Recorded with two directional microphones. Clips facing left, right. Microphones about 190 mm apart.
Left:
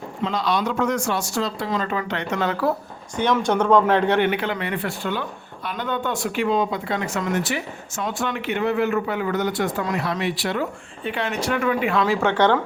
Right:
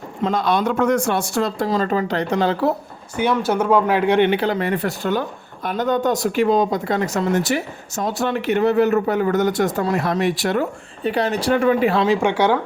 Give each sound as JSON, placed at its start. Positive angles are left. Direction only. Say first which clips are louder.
{"t": 0.2, "sound": "speech", "louder": "right 4 dB", "side_deg": -50}
{"t": 1.6, "sound": "speech", "louder": "right 5 dB", "side_deg": -35}
{"t": 3.2, "sound": "speech", "louder": "right 1 dB", "side_deg": -10}
{"t": 4.2, "sound": "speech", "louder": "right 5 dB", "side_deg": -30}
{"t": 12.0, "sound": "speech", "louder": "right 2 dB", "side_deg": -15}